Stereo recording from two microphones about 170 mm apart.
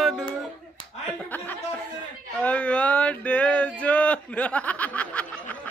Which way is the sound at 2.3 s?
10° left (ahead or behind).